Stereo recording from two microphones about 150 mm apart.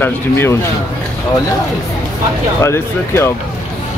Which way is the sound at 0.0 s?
15° left (ahead or behind).